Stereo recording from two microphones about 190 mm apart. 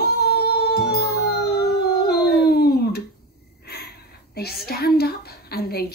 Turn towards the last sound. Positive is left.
turn(degrees=55)  # may be behind; listen again after turning